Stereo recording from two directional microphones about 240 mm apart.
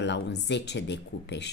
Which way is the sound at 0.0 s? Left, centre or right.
Left.